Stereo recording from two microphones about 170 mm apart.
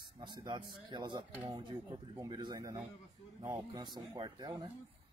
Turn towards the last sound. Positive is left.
turn(degrees=-25)  # may be behind; listen again after turning